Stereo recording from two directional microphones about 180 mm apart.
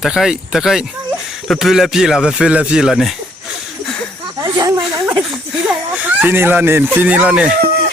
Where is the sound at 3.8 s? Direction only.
5° left (ahead or behind).